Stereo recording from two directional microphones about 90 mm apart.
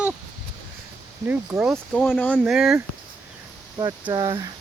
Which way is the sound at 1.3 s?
30° right (ahead or behind).